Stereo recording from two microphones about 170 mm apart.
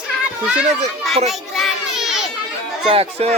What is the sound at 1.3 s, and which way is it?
Children playing, centre (ahead or behind).